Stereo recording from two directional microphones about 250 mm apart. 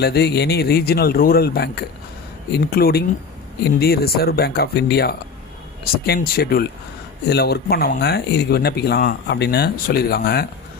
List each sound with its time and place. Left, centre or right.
0.0 s speech: left